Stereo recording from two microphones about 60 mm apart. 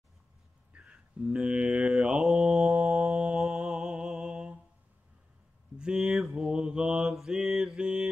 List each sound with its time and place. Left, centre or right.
0.7 s mantra: centre
2.3 s music: centre
3.3 s mantra: centre
5.8 s a sound: centre
6.1 s mantra: centre